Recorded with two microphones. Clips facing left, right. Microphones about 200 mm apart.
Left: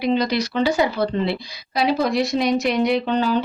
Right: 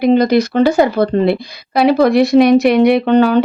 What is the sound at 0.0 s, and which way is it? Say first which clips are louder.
A woman's voice: right 9 dB; 50° right (ahead or behind).